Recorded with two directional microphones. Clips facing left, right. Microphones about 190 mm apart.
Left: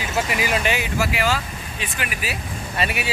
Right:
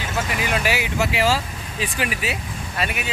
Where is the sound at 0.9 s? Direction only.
25° right (ahead or behind).